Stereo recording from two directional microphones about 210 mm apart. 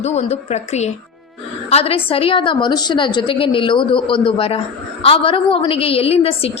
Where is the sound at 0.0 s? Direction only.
30° left (ahead or behind).